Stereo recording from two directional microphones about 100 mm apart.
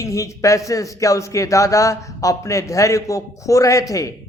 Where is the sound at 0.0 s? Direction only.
35° left (ahead or behind).